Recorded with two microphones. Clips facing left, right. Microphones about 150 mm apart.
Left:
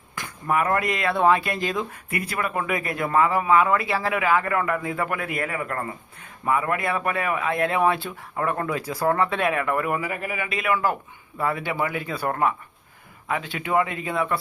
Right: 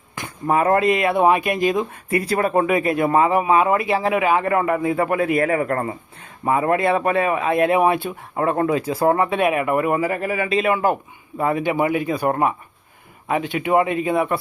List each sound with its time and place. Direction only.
0.2 s speech: 30° right (ahead or behind)
2.0 s speech: 30° right (ahead or behind)
5.4 s a man's voice: 45° right (ahead or behind)
6.4 s speech: 30° right (ahead or behind)
10.0 s a man's voice: 40° right (ahead or behind); by 14.3 s 20° right (ahead or behind)